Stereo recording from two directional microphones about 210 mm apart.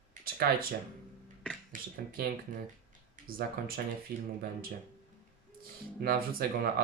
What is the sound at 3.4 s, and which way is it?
Speech, 45° right (ahead or behind).